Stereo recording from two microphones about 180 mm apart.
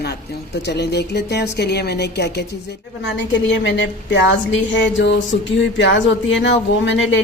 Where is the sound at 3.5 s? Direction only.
90° left.